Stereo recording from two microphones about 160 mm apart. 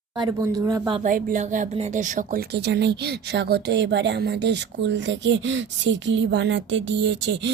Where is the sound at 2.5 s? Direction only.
90° right.